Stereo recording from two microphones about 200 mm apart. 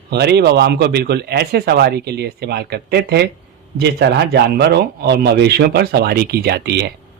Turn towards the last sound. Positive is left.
turn(degrees=-55)  # may be behind; listen again after turning